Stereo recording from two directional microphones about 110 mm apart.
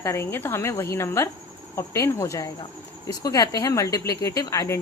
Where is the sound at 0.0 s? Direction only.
25° left (ahead or behind).